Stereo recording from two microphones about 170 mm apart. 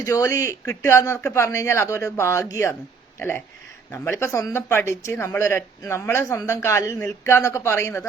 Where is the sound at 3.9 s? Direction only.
15° left (ahead or behind).